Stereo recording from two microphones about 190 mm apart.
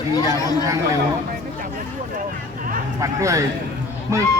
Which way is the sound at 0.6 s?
15° right (ahead or behind).